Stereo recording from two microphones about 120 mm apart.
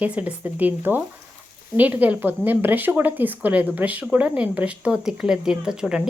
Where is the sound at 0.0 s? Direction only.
10° right (ahead or behind).